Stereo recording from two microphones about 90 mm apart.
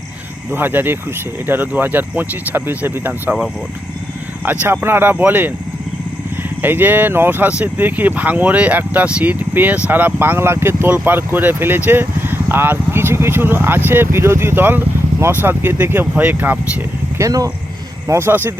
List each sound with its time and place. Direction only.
0.5 s speech: 25° right (ahead or behind)
4.4 s speech: 25° right (ahead or behind)
17.2 s speech: 40° right (ahead or behind)
18.1 s speech: 25° right (ahead or behind)